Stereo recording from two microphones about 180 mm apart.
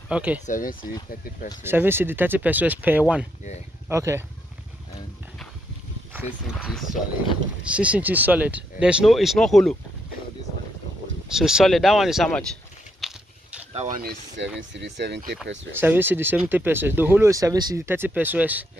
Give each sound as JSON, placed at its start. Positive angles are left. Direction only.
{"t": 0.1, "sound": "speech", "side_deg": -5}
{"t": 0.5, "sound": "speech", "side_deg": 50}
{"t": 1.6, "sound": "speech", "side_deg": -10}
{"t": 6.1, "sound": "speech", "side_deg": -5}
{"t": 11.2, "sound": "speech", "side_deg": -5}
{"t": 13.0, "sound": "biting", "side_deg": -5}
{"t": 13.7, "sound": "speech", "side_deg": -50}
{"t": 14.4, "sound": "speech", "side_deg": -85}
{"t": 15.8, "sound": "speech", "side_deg": -10}